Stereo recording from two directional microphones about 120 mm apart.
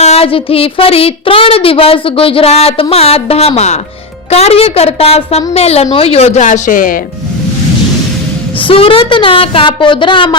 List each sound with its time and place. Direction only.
0.0 s a woman's voice: 60° left (ahead or behind); by 6.6 s 80° left
8.6 s speech: 50° left (ahead or behind)